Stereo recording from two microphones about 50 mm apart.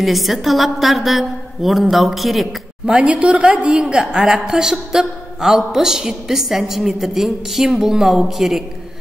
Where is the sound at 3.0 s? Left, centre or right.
Right.